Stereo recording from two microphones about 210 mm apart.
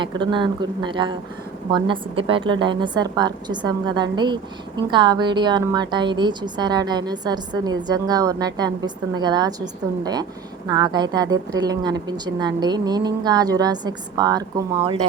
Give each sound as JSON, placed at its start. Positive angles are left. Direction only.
{"t": 0.0, "sound": "a woman's voice", "side_deg": -20}